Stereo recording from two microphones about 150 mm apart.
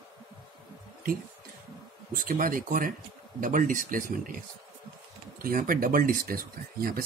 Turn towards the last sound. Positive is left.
turn(degrees=-75)  # may be behind; listen again after turning